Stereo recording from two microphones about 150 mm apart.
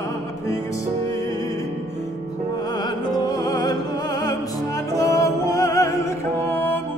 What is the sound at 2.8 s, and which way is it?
Music, 25° left (ahead or behind).